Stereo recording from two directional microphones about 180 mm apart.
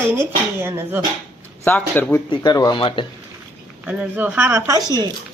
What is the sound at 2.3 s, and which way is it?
Speech, 20° left (ahead or behind).